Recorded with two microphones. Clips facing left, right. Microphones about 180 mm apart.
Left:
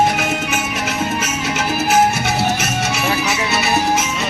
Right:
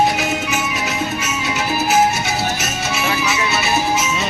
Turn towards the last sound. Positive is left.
turn(degrees=60)  # may be behind; listen again after turning